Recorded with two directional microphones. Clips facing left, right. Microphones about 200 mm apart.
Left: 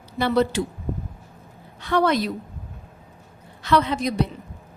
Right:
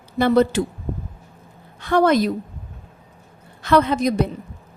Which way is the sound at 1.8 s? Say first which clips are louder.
Right 4 dB; 45° right (ahead or behind).